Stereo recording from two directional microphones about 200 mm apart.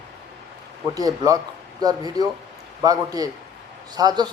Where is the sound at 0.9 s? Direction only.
20° right (ahead or behind).